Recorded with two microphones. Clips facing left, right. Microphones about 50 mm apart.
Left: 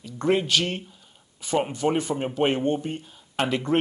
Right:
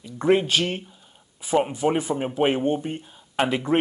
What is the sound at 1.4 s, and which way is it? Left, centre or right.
Speech, centre.